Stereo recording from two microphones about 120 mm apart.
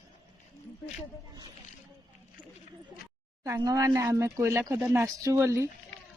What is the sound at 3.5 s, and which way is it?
Speech, 25° right (ahead or behind).